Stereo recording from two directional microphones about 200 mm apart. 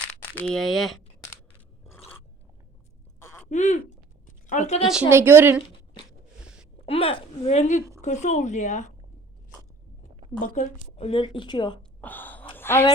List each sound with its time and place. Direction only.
0.3 s speech: centre (ahead or behind)
3.2 s a sound: 15° left (ahead or behind)
3.5 s speech: 35° left (ahead or behind)
4.9 s a woman's voice: 10° right (ahead or behind)
6.8 s a woman's voice: 30° left (ahead or behind)
10.4 s a woman's voice: 40° left (ahead or behind); by 11.8 s 25° left (ahead or behind)
11.8 s a sound: 10° left (ahead or behind)